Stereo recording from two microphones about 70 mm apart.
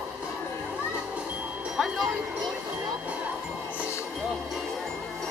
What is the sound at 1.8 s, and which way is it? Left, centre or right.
Music, centre.